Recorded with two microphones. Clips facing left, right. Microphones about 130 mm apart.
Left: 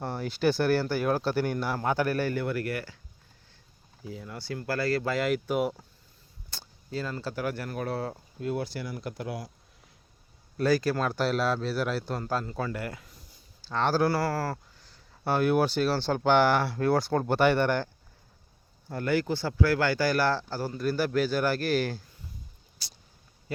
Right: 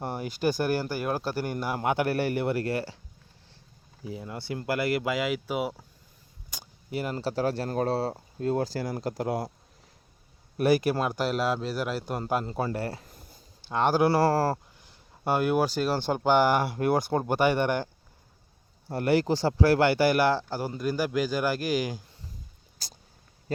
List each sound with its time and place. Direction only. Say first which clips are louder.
0.0 s speech: left 1 dB; 15° right (ahead or behind)
1.8 s speech: right 2 dB; 20° right (ahead or behind)
4.0 s speech: right 3 dB; 20° right (ahead or behind); by 5.8 s 5° right (ahead or behind)
6.5 s speech: right 2 dB; 20° right (ahead or behind); by 9.5 s 40° right (ahead or behind)
10.6 s speech: right 2 dB; 20° right (ahead or behind)
11.0 s speech: even; 10° right (ahead or behind)
12.2 s speech: right 3 dB; 25° right (ahead or behind)
13.1 s a sound: right 4 dB; 55° right (ahead or behind)
13.7 s speech: right 2 dB; 15° right (ahead or behind); by 14.6 s 30° right (ahead or behind)
14.8 s speech: right 2 dB; 15° right (ahead or behind)
18.9 s speech: right 3 dB; 30° right (ahead or behind); by 22.0 s 10° right (ahead or behind)
22.8 s a sound: right 4 dB; 45° right (ahead or behind)